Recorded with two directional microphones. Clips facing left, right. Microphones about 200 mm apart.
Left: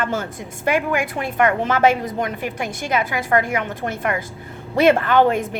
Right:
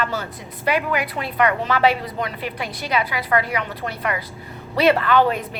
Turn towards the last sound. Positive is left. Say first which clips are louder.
# left 2 dB
turn(degrees=50)  # may be behind; listen again after turning